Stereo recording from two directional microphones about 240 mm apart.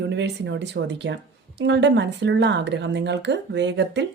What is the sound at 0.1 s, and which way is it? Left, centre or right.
Speech, right.